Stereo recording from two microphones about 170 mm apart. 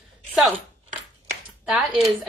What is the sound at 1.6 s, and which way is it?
Speech, 5° right (ahead or behind).